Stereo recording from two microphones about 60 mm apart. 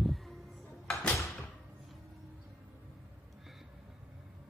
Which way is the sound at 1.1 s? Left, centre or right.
Left.